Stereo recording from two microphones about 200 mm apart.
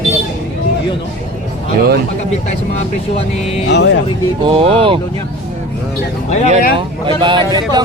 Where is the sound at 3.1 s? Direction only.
30° left (ahead or behind).